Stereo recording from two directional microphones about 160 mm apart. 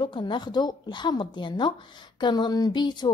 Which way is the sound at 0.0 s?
30° left (ahead or behind).